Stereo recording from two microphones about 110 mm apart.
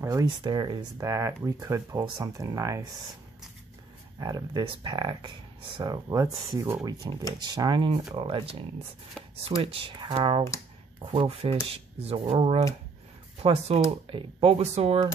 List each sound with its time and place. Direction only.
0.0 s speech: 30° right (ahead or behind)
0.4 s speech: 45° right (ahead or behind)
0.9 s speech: 30° right (ahead or behind)
4.2 s speech: 35° right (ahead or behind)
8.2 s speech: 50° right (ahead or behind)
9.2 s a sound: 5° left (ahead or behind)
9.6 s speech: 55° right (ahead or behind)
14.0 s speech: 55° right (ahead or behind); by 15.0 s 70° right (ahead or behind)